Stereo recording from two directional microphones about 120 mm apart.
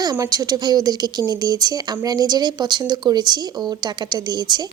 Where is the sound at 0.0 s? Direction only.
30° right (ahead or behind).